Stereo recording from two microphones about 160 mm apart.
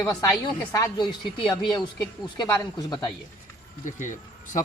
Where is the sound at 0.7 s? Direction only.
20° left (ahead or behind).